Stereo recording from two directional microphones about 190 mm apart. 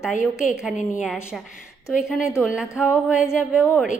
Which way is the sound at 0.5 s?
5° right (ahead or behind).